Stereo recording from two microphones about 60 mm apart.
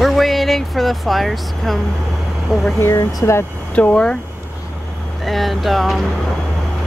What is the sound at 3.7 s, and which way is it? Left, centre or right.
Speech, centre.